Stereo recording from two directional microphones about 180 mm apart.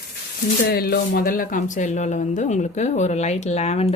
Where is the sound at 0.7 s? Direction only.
55° left (ahead or behind).